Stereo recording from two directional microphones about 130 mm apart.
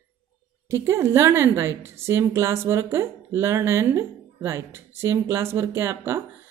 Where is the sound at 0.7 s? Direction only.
20° right (ahead or behind).